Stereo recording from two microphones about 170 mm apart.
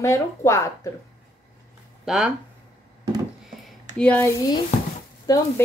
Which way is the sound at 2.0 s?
5° right (ahead or behind).